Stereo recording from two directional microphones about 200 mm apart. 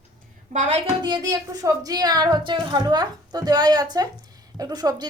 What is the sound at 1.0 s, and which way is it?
Speech, 20° right (ahead or behind).